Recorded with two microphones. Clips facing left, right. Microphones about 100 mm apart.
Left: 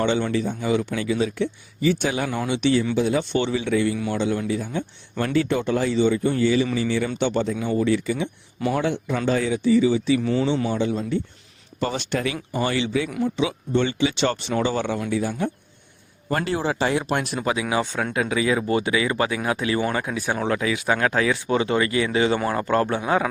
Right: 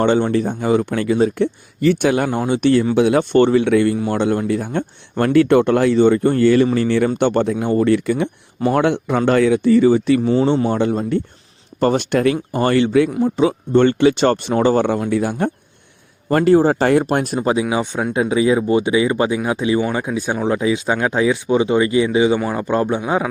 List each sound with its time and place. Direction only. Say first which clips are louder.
0.0 s speech: right 6 dB; 45° right (ahead or behind)
2.9 s speech: right 8 dB; 65° right (ahead or behind)
10.2 s speech: right 6 dB; 30° right (ahead or behind)
10.7 s speech: right 6 dB; 55° right (ahead or behind)
13.1 s speech: right 6 dB; 30° right (ahead or behind)
13.3 s speech: right 9 dB; 50° right (ahead or behind)
15.1 s speech: right 6 dB; 60° right (ahead or behind)
16.3 s a man's voice: right 11 dB; 45° right (ahead or behind); by 23.3 s 20° right (ahead or behind)